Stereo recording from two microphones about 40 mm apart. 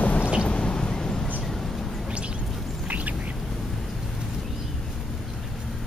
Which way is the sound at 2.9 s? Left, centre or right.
Right.